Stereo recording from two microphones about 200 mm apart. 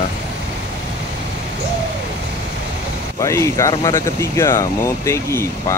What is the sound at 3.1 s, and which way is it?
Speech, 15° left (ahead or behind).